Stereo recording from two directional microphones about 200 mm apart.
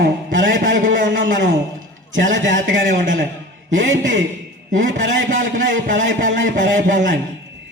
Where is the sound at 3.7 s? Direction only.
70° right (ahead or behind).